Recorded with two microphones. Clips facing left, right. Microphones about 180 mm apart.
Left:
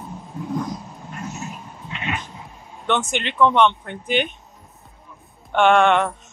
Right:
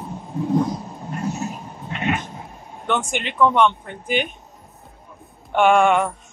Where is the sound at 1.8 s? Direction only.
50° right (ahead or behind).